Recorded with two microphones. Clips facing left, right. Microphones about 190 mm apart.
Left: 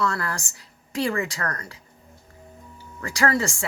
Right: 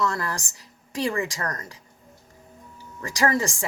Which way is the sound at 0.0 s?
20° right (ahead or behind).